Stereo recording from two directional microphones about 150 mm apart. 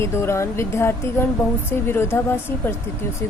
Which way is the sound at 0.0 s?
15° left (ahead or behind).